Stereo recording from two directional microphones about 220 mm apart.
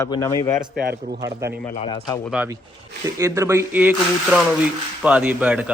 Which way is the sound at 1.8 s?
20° left (ahead or behind).